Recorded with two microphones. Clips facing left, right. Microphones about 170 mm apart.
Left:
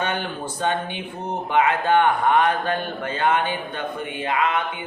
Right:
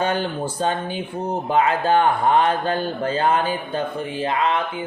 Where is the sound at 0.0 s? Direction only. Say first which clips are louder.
Right 4 dB; 35° right (ahead or behind).